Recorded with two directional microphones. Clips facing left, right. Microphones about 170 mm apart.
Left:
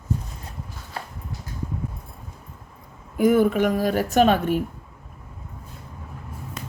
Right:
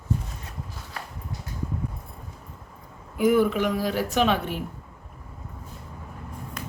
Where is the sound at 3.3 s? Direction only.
45° left (ahead or behind).